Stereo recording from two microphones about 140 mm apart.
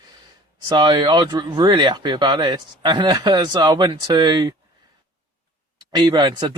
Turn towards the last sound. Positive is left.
turn(degrees=-30)  # may be behind; listen again after turning